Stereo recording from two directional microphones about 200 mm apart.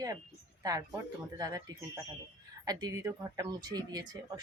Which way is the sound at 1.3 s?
20° right (ahead or behind).